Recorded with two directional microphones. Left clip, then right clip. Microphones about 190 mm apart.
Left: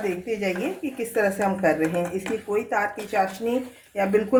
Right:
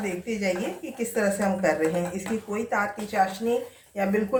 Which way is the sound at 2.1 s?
55° left (ahead or behind).